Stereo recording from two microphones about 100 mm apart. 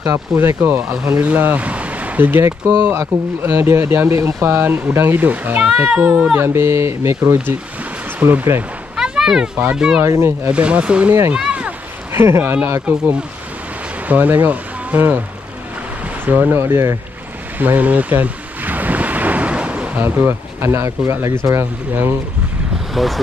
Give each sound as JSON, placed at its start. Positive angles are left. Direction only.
{"t": 0.0, "sound": "speech", "side_deg": -25}
{"t": 8.9, "sound": "a sound", "side_deg": -5}
{"t": 9.6, "sound": "speech", "side_deg": -10}
{"t": 10.0, "sound": "speech", "side_deg": -25}
{"t": 10.5, "sound": "speech", "side_deg": -10}
{"t": 11.3, "sound": "a sound", "side_deg": -10}
{"t": 12.1, "sound": "speech", "side_deg": -25}
{"t": 12.8, "sound": "speech", "side_deg": -10}
{"t": 16.3, "sound": "speech", "side_deg": -20}
{"t": 17.6, "sound": "ocean", "side_deg": -15}
{"t": 20.2, "sound": "speech", "side_deg": -25}
{"t": 23.0, "sound": "speech", "side_deg": 0}